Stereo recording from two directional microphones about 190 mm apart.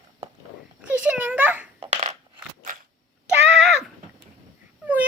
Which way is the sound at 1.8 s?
35° right (ahead or behind).